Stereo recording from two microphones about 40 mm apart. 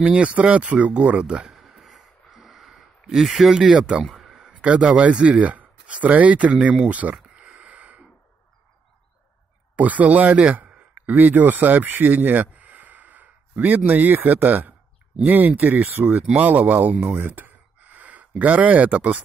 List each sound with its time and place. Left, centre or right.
0.0 s speech: right
1.5 s a sound: centre
3.3 s speech: centre
3.5 s speech: right
4.0 s a sound: centre
4.4 s speech: right
7.3 s a sound: right
9.8 s speech: right
16.3 s speech: right
17.1 s speech: right
17.4 s gasp: right
18.4 s speech: right